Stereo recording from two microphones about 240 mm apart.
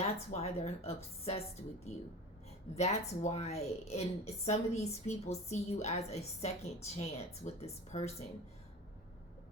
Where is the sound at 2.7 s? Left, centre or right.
Left.